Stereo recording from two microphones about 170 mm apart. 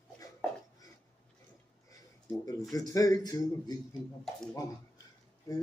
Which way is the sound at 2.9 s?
20° left (ahead or behind).